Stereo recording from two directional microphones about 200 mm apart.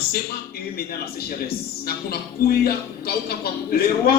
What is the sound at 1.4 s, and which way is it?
A man's voice, 50° left (ahead or behind).